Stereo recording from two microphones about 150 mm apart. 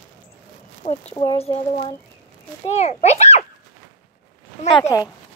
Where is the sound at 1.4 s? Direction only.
40° left (ahead or behind).